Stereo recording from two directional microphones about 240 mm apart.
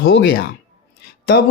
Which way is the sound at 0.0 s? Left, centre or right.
Left.